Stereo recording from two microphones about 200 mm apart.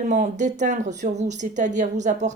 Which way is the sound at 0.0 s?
40° right (ahead or behind).